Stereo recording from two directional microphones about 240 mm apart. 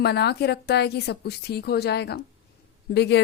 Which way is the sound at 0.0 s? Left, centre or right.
Left.